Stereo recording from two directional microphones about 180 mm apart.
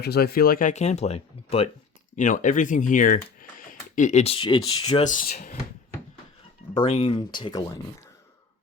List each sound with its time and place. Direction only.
0.0 s speech: 60° left (ahead or behind); by 1.7 s 35° left (ahead or behind)
2.1 s speech: 45° left (ahead or behind); by 5.0 s 25° left (ahead or behind)
5.0 s speech: 40° left (ahead or behind)
6.7 s speech: 30° left (ahead or behind)